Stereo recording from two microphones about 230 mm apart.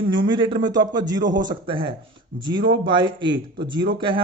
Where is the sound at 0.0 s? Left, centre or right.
Centre.